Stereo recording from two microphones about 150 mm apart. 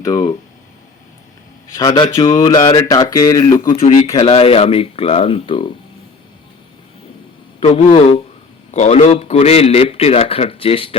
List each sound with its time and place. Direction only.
0.0 s speech: 25° left (ahead or behind)
1.7 s speech: 25° left (ahead or behind)
3.8 s speech: 40° left (ahead or behind)
7.7 s a man's voice: 40° left (ahead or behind)